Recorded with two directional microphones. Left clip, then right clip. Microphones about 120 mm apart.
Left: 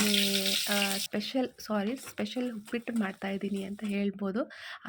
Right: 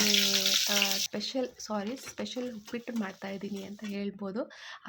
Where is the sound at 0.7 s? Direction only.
15° left (ahead or behind).